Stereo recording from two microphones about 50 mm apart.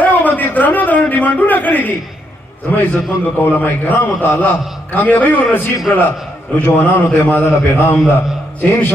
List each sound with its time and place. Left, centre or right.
0.0 s a sound: left
2.7 s a man's voice: left
7.3 s a man's voice: left